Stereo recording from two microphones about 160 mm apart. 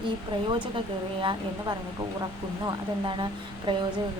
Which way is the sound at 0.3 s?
30° right (ahead or behind).